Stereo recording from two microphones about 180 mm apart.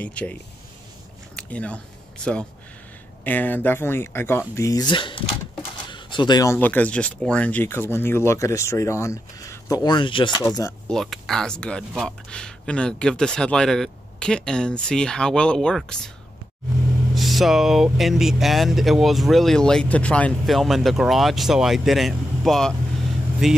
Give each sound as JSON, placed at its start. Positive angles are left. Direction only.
{"t": 0.0, "sound": "speech", "side_deg": 5}
{"t": 1.3, "sound": "a sound", "side_deg": 5}
{"t": 3.3, "sound": "speech", "side_deg": 10}
{"t": 10.9, "sound": "speech", "side_deg": 0}
{"t": 17.1, "sound": "speech", "side_deg": 0}